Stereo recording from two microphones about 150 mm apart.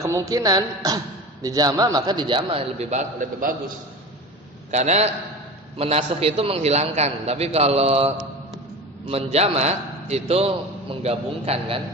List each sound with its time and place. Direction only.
0.0 s speech: 20° right (ahead or behind); by 3.5 s 55° right (ahead or behind)
4.7 s a man's voice: 50° right (ahead or behind)